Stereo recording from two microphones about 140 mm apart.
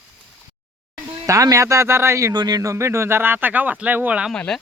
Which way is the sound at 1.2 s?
25° right (ahead or behind).